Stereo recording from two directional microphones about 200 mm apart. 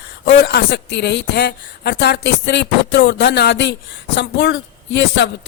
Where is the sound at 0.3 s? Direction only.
60° left (ahead or behind).